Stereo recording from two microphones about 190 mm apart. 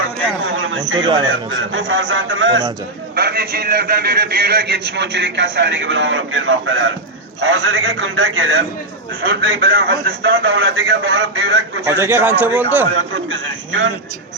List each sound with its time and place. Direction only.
0.4 s a sound: 80° right
0.9 s speech: 25° right (ahead or behind)
1.5 s a man's voice: 80° right
3.2 s a man's voice: 55° right (ahead or behind); by 6.9 s 80° right
7.4 s a man's voice: 90° right
9.6 s a man's voice: 50° right (ahead or behind)
10.5 s a man's voice: 90° right
11.9 s a man's voice: 15° right (ahead or behind)
13.1 s a man's voice: 75° right (ahead or behind)